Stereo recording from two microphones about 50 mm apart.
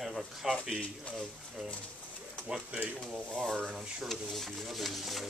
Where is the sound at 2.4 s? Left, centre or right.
Centre.